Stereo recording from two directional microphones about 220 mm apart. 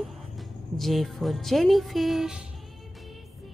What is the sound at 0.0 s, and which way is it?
Speech, centre (ahead or behind).